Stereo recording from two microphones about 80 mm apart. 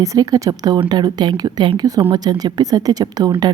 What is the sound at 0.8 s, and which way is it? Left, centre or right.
Speech, right.